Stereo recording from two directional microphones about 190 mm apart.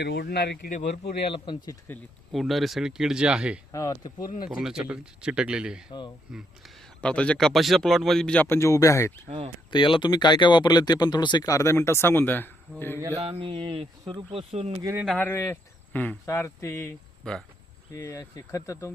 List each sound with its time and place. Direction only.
0.0 s speech: 60° left (ahead or behind)
1.3 s speech: 25° left (ahead or behind)
2.3 s speech: centre (ahead or behind)
3.7 s speech: 15° left (ahead or behind)
4.2 s speech: 45° left (ahead or behind)
4.4 s speech: 5° right (ahead or behind)
13.1 s speech: 30° right (ahead or behind)
15.0 s speech: centre (ahead or behind)
15.3 s speech: 15° left (ahead or behind)